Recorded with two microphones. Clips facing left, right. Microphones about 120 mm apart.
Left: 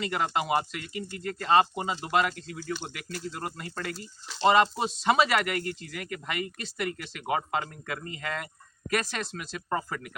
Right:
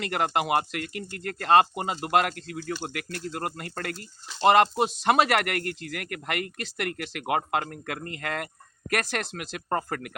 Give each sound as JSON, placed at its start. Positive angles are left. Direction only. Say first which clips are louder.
{"t": 0.0, "sound": "speech", "louder": "right 2 dB", "side_deg": -60}